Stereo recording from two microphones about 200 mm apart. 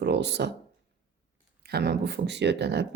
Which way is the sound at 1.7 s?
55° right (ahead or behind).